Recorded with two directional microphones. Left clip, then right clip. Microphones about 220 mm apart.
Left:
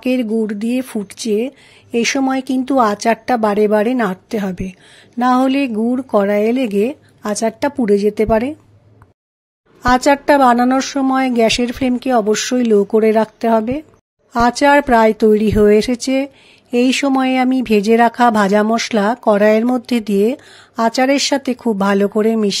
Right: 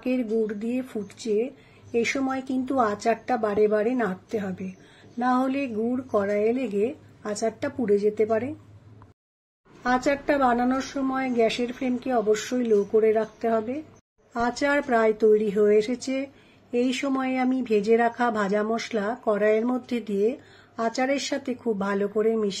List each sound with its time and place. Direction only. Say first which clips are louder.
0.0 s speech: left 8 dB; 50° left (ahead or behind)
9.8 s speech: left 11 dB; 50° left (ahead or behind)